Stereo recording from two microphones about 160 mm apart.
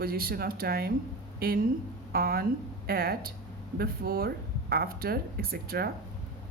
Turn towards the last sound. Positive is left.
turn(degrees=-70)  # may be behind; listen again after turning